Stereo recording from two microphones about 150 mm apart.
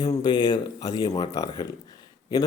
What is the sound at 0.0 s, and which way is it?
Speech, 30° left (ahead or behind).